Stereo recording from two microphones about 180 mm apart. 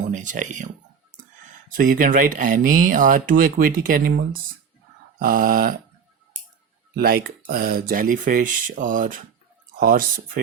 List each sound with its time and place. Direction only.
0.0 s a sound: 45° right (ahead or behind)
1.7 s speech: 50° right (ahead or behind)
6.9 s speech: 55° right (ahead or behind)